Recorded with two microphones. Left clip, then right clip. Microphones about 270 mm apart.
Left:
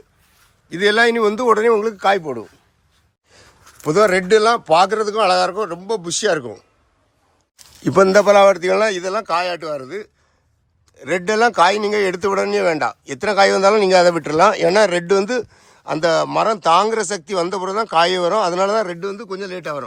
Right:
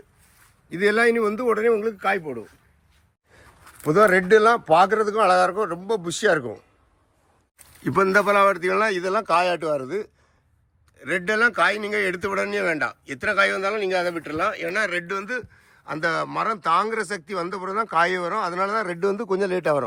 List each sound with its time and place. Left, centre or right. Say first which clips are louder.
0.7 s speech: left 4 dB; centre
3.3 s speech: left 3 dB; centre
7.9 s speech: left 7 dB; centre
10.9 s speech: left 5 dB; centre
18.9 s speech: right 3 dB; centre